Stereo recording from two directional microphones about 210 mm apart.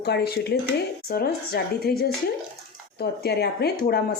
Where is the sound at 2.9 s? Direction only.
50° left (ahead or behind).